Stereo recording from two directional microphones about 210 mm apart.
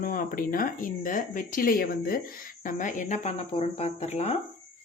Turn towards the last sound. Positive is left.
turn(degrees=30)  # may be behind; listen again after turning